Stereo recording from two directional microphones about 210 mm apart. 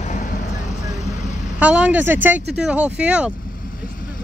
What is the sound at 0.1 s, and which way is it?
Vehicle, 40° left (ahead or behind).